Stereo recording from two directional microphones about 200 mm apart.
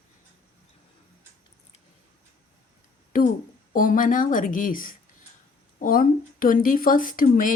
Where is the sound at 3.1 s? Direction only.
40° left (ahead or behind).